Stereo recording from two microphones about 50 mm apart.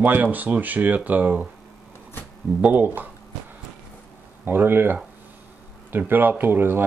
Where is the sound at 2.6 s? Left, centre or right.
Right.